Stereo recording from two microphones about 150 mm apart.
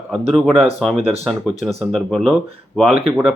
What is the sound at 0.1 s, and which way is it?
Speech, centre (ahead or behind).